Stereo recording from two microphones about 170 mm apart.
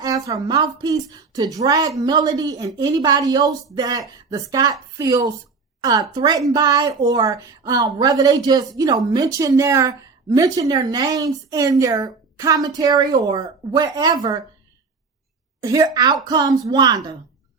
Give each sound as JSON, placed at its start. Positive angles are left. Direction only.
{"t": 0.0, "sound": "a woman's voice", "side_deg": -20}
{"t": 15.6, "sound": "a woman's voice", "side_deg": -20}